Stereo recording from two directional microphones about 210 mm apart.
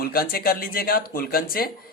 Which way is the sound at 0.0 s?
45° left (ahead or behind).